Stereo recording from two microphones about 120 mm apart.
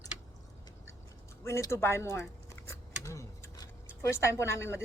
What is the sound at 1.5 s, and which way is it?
Speech, 25° left (ahead or behind).